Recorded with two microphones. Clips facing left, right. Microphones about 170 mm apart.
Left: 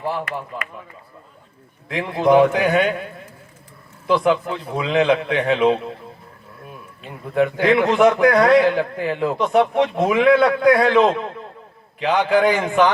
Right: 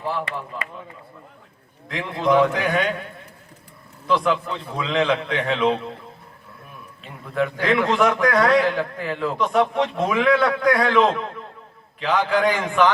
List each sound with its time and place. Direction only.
0.3 s a man's voice: 30° right (ahead or behind)
1.9 s a man's voice: 30° left (ahead or behind)
4.0 s a man's voice: 30° left (ahead or behind)
7.0 s a man's voice: 30° left (ahead or behind)